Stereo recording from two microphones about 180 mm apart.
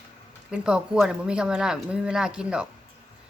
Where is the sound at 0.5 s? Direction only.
5° right (ahead or behind).